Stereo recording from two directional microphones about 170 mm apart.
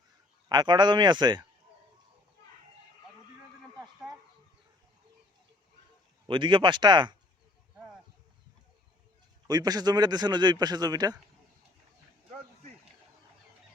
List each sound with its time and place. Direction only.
0.4 s a man's voice: 25° right (ahead or behind)
6.2 s a man's voice: 30° right (ahead or behind)
9.5 s a man's voice: 20° right (ahead or behind)